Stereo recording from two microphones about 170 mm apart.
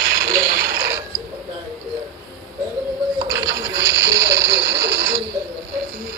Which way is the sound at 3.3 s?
20° right (ahead or behind).